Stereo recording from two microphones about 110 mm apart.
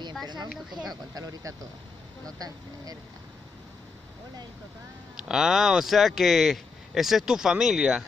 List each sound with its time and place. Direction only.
0.7 s speech: centre (ahead or behind)
1.1 s speech: 35° right (ahead or behind)
5.1 s speech: 5° right (ahead or behind)